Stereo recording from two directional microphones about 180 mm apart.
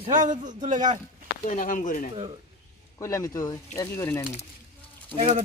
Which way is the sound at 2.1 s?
30° right (ahead or behind).